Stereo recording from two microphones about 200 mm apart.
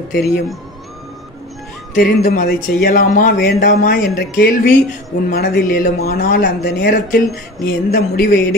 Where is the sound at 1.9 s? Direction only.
45° left (ahead or behind).